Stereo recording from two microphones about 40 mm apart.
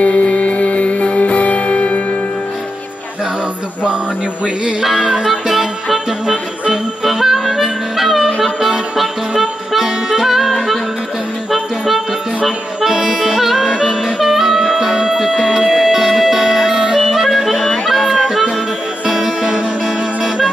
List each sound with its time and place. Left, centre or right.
0.0 s music: left
4.8 s music: centre
13.1 s music: centre